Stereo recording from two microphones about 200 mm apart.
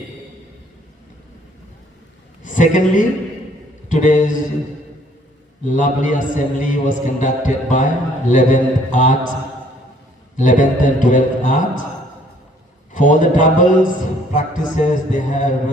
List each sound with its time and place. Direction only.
2.4 s a man's voice: 40° left (ahead or behind)
5.6 s a man's voice: 40° left (ahead or behind)
10.3 s a man's voice: 40° left (ahead or behind)
12.9 s a man's voice: 40° left (ahead or behind)